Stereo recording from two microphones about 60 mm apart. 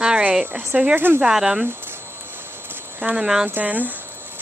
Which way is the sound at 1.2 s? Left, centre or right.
Centre.